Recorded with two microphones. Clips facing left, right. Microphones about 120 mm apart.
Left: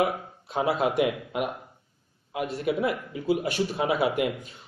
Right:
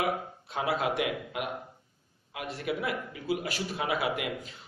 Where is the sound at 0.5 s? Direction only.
25° left (ahead or behind).